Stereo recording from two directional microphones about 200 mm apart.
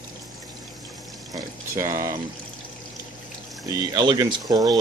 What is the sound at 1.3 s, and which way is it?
Speech, 15° right (ahead or behind).